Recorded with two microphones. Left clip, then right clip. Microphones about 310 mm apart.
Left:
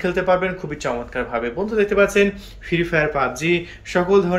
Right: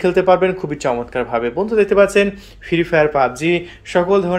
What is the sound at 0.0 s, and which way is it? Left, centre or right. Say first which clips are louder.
Speech: right 5 dB; right.